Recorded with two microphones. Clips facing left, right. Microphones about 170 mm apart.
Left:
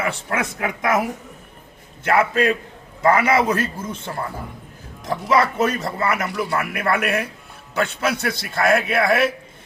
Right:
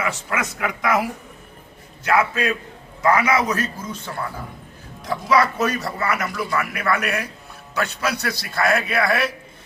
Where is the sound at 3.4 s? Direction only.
30° left (ahead or behind).